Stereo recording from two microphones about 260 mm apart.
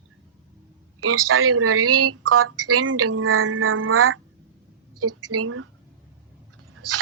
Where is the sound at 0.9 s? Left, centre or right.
Right.